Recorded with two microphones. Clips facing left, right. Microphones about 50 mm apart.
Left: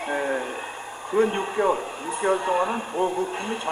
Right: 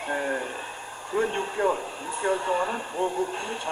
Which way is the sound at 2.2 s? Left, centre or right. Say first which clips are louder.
Left 3 dB; left.